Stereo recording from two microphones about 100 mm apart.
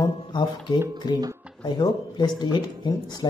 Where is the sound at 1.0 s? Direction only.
40° left (ahead or behind).